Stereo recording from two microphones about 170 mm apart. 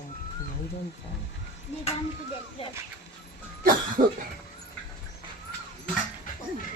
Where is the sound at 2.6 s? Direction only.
35° left (ahead or behind).